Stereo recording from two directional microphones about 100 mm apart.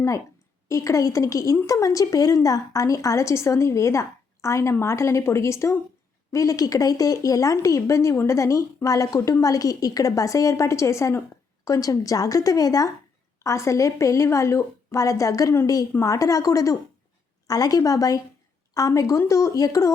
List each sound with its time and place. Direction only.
0.7 s a woman's voice: 30° left (ahead or behind)